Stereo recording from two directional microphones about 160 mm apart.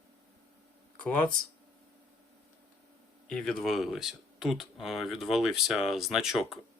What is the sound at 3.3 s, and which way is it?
Speech, 5° left (ahead or behind).